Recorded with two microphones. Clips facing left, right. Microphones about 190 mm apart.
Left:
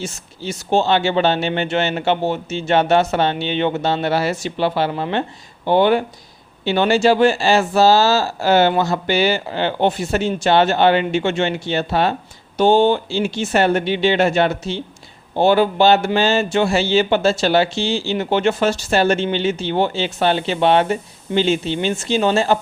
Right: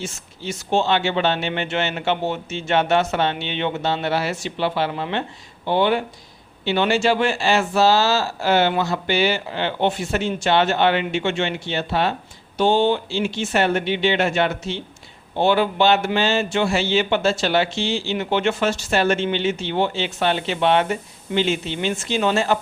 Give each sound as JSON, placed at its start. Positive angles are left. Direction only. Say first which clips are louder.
{"t": 0.0, "sound": "speech", "louder": "left 3 dB", "side_deg": 40}